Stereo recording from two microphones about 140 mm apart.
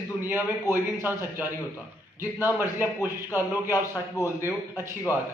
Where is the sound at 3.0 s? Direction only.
20° right (ahead or behind).